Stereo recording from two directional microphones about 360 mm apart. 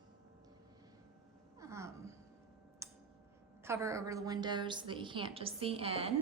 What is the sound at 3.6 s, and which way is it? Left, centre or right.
A woman's voice, centre.